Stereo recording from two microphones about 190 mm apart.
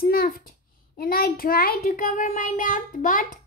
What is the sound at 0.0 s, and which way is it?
A child's voice, 50° left (ahead or behind).